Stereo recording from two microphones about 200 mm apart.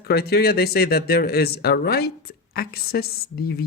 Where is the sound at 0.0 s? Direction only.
55° left (ahead or behind).